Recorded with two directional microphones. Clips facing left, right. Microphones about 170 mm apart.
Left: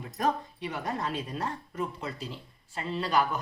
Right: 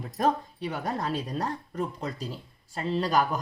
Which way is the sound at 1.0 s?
35° right (ahead or behind).